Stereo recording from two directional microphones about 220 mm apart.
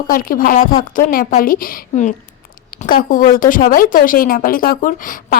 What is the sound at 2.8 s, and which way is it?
Speech, 40° left (ahead or behind).